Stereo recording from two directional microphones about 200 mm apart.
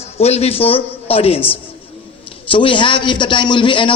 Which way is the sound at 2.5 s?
25° left (ahead or behind).